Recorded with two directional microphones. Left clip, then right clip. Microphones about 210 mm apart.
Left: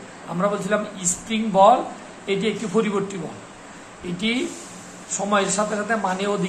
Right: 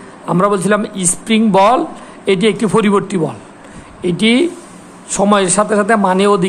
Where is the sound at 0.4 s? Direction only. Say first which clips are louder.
Right 8 dB; 55° right (ahead or behind).